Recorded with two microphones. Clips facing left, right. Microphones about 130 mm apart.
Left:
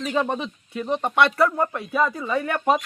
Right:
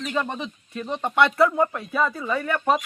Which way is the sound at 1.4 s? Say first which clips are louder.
Right 1 dB; centre (ahead or behind).